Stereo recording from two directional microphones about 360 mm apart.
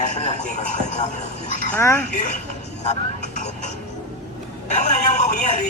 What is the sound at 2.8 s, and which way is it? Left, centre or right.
Vehicle, centre.